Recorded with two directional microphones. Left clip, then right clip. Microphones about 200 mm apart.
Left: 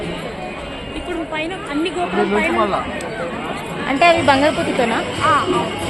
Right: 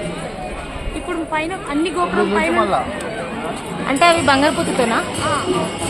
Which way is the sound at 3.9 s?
Centre (ahead or behind).